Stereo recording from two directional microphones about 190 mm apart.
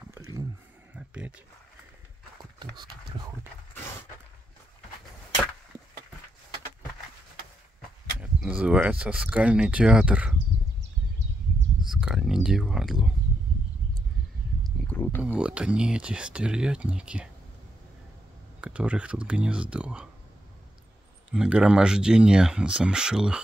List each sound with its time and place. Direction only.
0.1 s a sound: 15° right (ahead or behind)
2.6 s speech: 20° right (ahead or behind)
8.2 s speech: 5° right (ahead or behind)
11.9 s speech: 5° right (ahead or behind)
14.9 s speech: 5° left (ahead or behind)
15.2 s speech: 5° right (ahead or behind)
18.6 s speech: 5° right (ahead or behind)
21.3 s speech: 5° right (ahead or behind)